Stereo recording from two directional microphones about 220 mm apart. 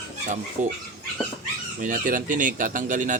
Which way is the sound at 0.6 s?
35° right (ahead or behind).